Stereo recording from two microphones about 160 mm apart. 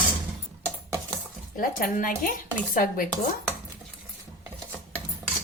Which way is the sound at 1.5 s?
60° left (ahead or behind).